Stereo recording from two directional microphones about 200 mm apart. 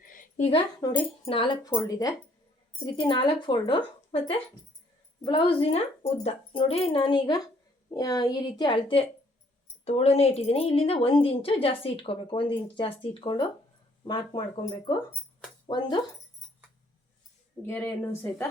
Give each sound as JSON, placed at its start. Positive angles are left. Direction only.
{"t": 0.0, "sound": "a sound", "side_deg": 40}
{"t": 0.5, "sound": "speech", "side_deg": 20}
{"t": 17.7, "sound": "speech", "side_deg": 10}